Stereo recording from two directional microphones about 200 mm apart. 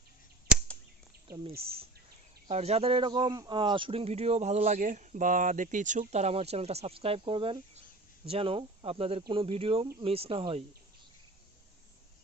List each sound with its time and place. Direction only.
2.5 s speech: 30° right (ahead or behind)